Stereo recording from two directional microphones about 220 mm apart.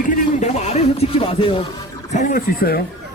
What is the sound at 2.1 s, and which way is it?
Speech, 40° left (ahead or behind).